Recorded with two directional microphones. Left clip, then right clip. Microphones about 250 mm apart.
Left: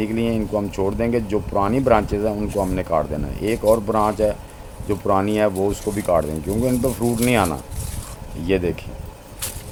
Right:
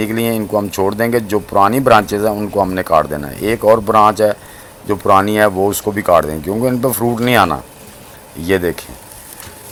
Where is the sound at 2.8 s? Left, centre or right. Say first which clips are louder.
Right 8 dB; centre.